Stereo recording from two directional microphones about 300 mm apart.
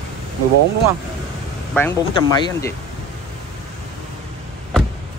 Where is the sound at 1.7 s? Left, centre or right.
Centre.